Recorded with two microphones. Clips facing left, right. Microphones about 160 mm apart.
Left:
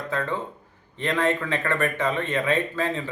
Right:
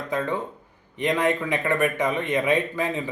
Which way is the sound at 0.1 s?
15° right (ahead or behind).